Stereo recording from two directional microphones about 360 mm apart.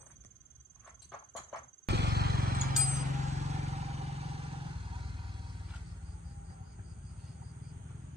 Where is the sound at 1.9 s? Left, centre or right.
Right.